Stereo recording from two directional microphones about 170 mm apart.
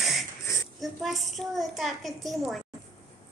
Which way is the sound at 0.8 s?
Centre (ahead or behind).